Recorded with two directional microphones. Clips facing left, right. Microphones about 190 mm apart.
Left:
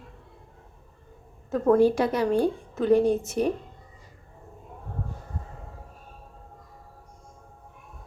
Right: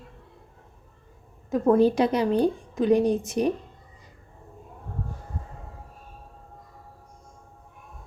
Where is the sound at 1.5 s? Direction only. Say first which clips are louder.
Even; 10° right (ahead or behind).